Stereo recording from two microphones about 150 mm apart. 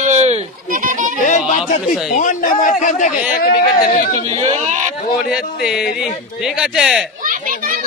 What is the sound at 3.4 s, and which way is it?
Speech, 85° left.